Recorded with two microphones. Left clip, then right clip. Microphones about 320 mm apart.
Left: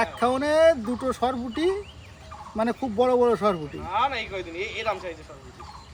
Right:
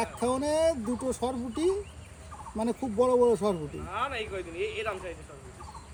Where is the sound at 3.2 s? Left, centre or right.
Centre.